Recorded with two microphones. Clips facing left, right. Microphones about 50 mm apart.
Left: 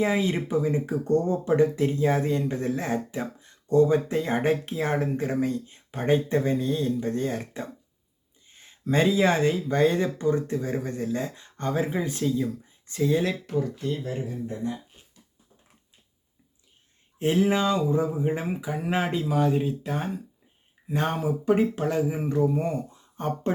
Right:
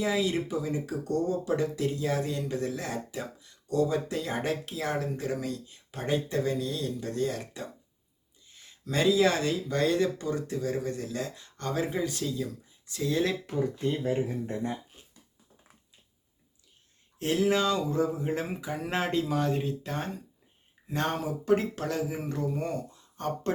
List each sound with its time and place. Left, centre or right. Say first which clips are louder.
0.0 s speech: left 3 dB; left
13.8 s speech: right 1 dB; right
14.4 s speech: left 1 dB; right
17.2 s speech: left 3 dB; left